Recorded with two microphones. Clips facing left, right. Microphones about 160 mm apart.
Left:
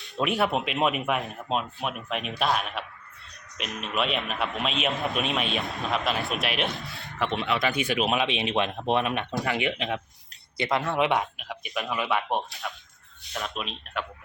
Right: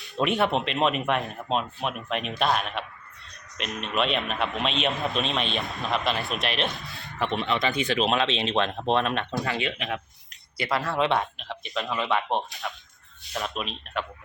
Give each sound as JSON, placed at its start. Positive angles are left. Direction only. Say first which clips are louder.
{"t": 0.2, "sound": "speech", "louder": "right 1 dB", "side_deg": 0}